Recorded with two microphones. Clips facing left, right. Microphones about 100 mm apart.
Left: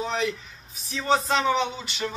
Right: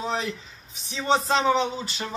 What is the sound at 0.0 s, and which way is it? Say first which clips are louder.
Speech: left 1 dB; 30° right (ahead or behind).